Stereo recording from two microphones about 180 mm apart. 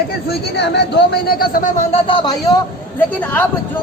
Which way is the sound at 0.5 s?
70° left (ahead or behind).